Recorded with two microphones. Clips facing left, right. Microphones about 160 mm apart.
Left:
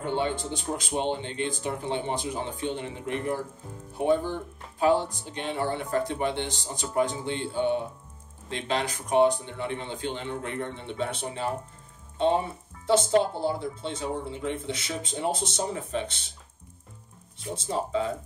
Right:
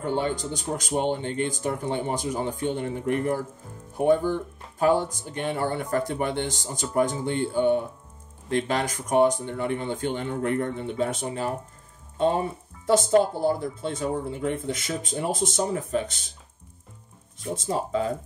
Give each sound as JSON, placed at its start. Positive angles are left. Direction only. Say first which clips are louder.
{"t": 0.0, "sound": "speech", "louder": "right 2 dB", "side_deg": -40}